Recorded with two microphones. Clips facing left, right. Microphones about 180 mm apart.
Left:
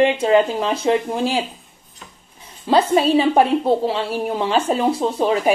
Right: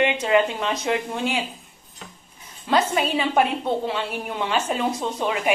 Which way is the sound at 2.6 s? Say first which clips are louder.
Left 6 dB; 35° left (ahead or behind).